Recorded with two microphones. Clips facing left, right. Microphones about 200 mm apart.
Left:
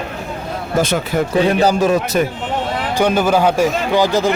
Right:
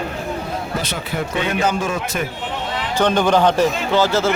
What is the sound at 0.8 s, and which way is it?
Speech, 50° left (ahead or behind).